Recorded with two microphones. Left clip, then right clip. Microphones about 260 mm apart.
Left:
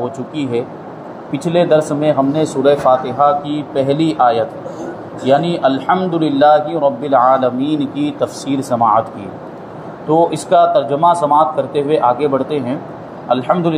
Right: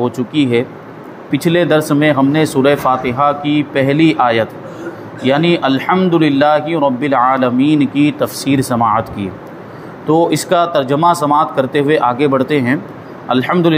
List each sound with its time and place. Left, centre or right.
0.0 s a man's voice: right
10.0 s a man's voice: right